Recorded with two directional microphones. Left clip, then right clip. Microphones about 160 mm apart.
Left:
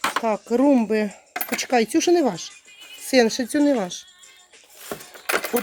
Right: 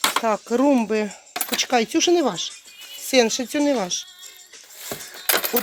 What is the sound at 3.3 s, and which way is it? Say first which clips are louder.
Speech: left 1 dB; 30° left (ahead or behind).